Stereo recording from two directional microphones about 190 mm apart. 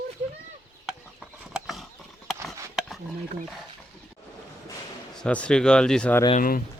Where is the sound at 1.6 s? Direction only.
Centre (ahead or behind).